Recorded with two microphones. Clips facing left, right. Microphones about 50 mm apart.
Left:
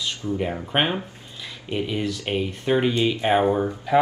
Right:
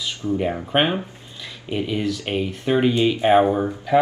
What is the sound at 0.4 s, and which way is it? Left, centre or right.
Speech, centre.